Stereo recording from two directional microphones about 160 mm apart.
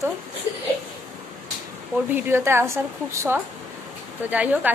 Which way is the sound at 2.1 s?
15° right (ahead or behind).